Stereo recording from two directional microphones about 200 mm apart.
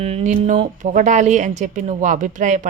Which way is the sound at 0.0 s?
30° right (ahead or behind).